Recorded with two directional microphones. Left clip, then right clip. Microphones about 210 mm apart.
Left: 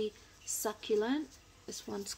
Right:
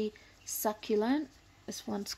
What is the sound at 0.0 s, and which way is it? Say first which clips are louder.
Speech: right 1 dB; 30° right (ahead or behind).